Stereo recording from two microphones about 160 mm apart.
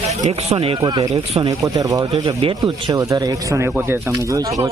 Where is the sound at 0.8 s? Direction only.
20° right (ahead or behind).